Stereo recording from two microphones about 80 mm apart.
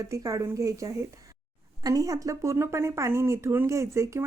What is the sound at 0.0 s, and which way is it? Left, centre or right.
A woman's voice, right.